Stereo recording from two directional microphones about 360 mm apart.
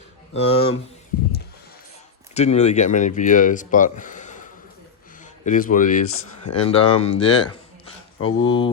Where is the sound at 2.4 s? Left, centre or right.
Centre.